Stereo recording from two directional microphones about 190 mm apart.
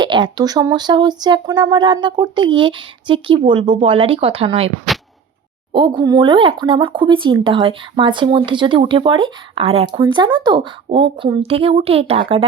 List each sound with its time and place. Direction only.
0.0 s speech: 25° right (ahead or behind)
5.7 s a woman's voice: 25° right (ahead or behind)